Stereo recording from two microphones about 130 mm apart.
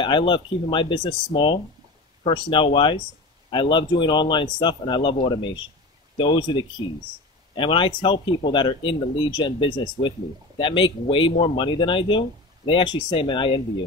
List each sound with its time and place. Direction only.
0.0 s a man's voice: 40° left (ahead or behind)